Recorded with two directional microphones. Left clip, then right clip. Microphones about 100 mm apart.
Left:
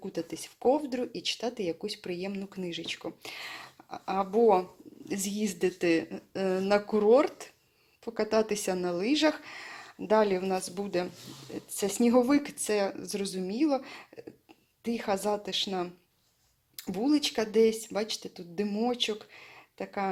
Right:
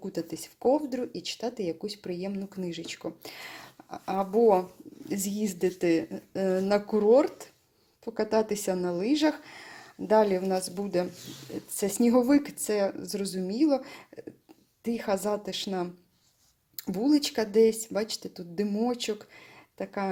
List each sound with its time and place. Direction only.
0.0 s speech: 40° right (ahead or behind)